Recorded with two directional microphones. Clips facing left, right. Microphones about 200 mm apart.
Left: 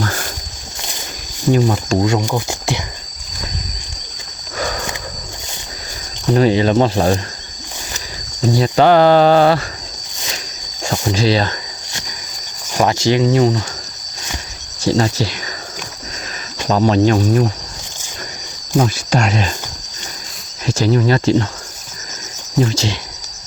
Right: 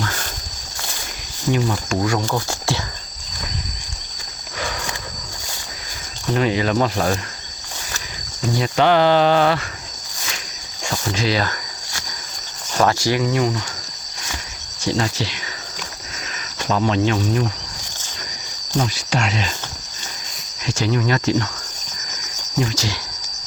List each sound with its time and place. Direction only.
1.5 s speech: 35° left (ahead or behind)
1.9 s speech: 25° left (ahead or behind)
4.6 s a sound: 45° left (ahead or behind)
6.3 s speech: 35° left (ahead or behind)
8.4 s speech: 35° left (ahead or behind)
11.1 s speech: 30° left (ahead or behind)
12.7 s speech: 20° left (ahead or behind)
14.8 s speech: 40° left (ahead or behind)
16.6 s speech: 40° left (ahead or behind)
18.8 s speech: 45° left (ahead or behind)
20.7 s speech: 35° left (ahead or behind)
22.7 s speech: 25° left (ahead or behind)